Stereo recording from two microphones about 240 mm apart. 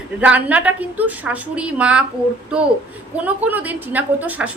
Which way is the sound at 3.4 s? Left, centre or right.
Centre.